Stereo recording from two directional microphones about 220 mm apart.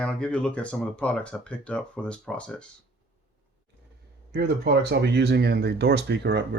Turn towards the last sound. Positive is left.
turn(degrees=-50)  # may be behind; listen again after turning